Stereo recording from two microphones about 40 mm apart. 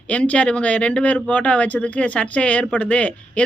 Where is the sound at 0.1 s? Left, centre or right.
Left.